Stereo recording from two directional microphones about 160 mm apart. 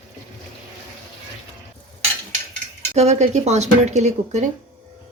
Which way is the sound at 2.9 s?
45° right (ahead or behind).